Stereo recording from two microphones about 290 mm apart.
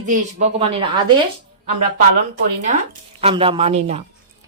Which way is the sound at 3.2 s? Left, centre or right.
Centre.